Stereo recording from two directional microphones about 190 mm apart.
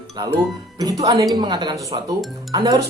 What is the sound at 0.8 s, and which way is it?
Speech, 20° right (ahead or behind).